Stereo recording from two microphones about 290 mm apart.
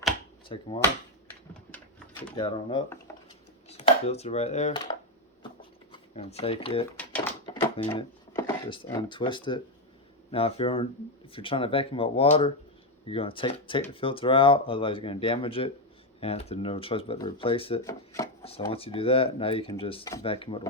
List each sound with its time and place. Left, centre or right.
0.4 s speech: centre
2.3 s speech: centre
3.7 s dishes: left
5.9 s speech: left
7.4 s a sound: centre
7.9 s speech: centre